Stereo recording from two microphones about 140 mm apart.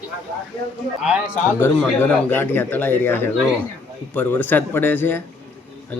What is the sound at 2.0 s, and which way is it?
A man's voice, 15° left (ahead or behind).